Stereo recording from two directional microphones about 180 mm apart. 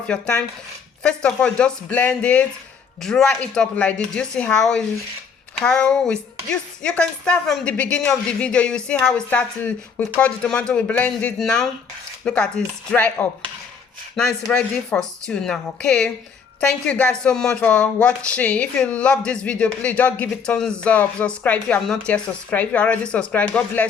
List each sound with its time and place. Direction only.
0.1 s a woman's voice: 5° left (ahead or behind)